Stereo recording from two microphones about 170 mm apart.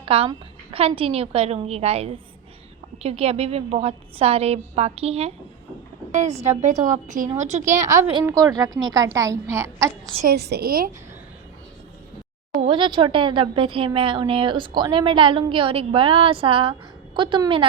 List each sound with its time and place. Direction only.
0.0 s a woman's voice: 35° right (ahead or behind)
6.4 s a woman's voice: 40° right (ahead or behind)
8.2 s a woman's voice: 20° right (ahead or behind)
10.2 s a woman's voice: 70° right (ahead or behind)
12.6 s a woman's voice: 30° right (ahead or behind)